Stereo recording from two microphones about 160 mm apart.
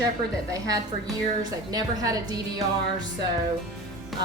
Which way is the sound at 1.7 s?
25° right (ahead or behind).